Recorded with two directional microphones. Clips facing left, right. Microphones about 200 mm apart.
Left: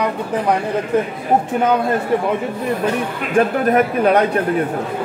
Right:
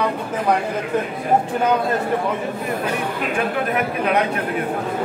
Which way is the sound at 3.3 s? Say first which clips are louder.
Left 9 dB; 40° left (ahead or behind).